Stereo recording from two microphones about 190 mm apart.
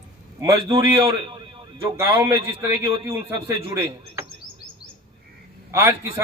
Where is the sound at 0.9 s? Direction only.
30° right (ahead or behind).